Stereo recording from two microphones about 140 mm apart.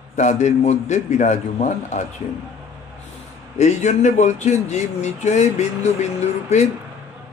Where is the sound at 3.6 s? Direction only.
55° left (ahead or behind).